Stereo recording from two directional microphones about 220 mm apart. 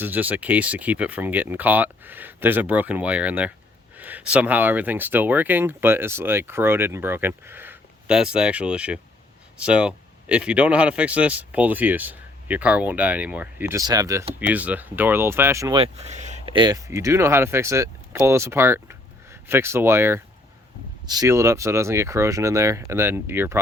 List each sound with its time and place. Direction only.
0.0 s speech: 10° right (ahead or behind)
15.8 s a sound: 30° right (ahead or behind)
16.6 s speech: 15° right (ahead or behind)